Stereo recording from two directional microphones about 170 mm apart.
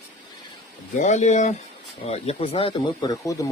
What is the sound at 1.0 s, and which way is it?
Speech, 45° left (ahead or behind).